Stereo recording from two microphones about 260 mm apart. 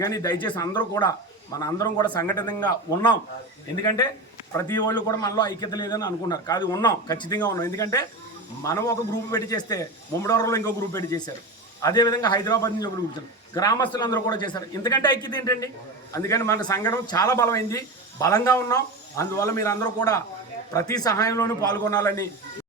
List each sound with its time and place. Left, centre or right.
0.0 s a man's voice: centre
3.8 s a man's voice: centre